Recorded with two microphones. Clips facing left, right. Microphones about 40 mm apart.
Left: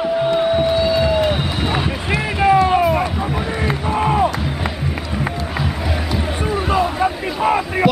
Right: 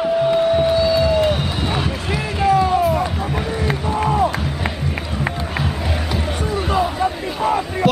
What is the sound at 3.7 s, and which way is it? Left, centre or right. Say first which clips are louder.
Run: left 2 dB; centre.